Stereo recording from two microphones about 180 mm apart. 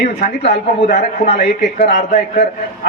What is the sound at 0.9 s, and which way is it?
A man's voice, 50° left (ahead or behind).